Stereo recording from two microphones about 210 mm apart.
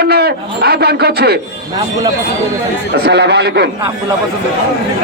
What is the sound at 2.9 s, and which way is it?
Speech, 50° right (ahead or behind).